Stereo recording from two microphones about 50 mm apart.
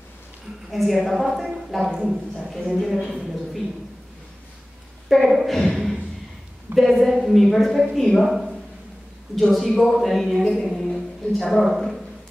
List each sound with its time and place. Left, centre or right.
0.7 s a woman's voice: centre
5.1 s a woman's voice: centre